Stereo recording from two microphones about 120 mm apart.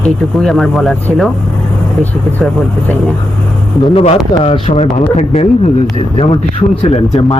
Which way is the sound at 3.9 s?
60° left (ahead or behind).